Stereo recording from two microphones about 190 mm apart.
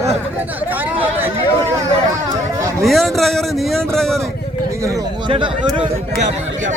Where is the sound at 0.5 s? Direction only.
10° right (ahead or behind).